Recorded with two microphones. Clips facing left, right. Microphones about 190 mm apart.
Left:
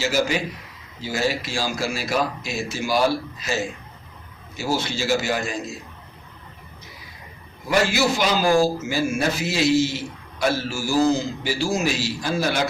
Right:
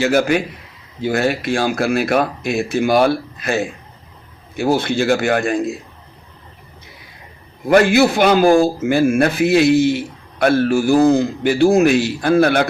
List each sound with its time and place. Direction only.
0.0 s a man's voice: 60° right (ahead or behind)
7.7 s a man's voice: 55° right (ahead or behind)